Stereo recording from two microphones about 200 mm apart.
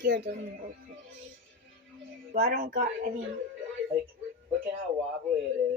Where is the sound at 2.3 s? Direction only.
45° right (ahead or behind).